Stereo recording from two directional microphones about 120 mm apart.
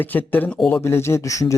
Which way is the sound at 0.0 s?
15° left (ahead or behind).